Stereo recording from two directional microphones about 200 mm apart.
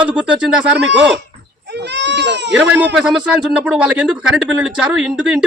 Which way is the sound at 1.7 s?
60° right (ahead or behind).